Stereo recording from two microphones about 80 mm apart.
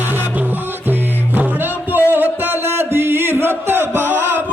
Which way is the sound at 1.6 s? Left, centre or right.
Right.